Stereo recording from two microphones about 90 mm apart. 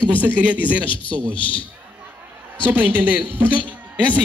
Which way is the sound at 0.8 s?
65° left (ahead or behind).